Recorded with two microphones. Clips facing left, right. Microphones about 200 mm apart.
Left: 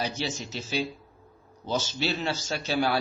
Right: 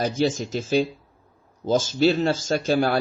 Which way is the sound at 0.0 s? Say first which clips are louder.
Right 9 dB; 50° right (ahead or behind).